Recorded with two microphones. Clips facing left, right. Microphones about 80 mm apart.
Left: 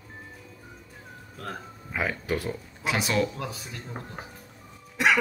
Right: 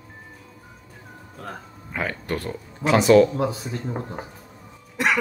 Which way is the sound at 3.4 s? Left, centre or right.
Right.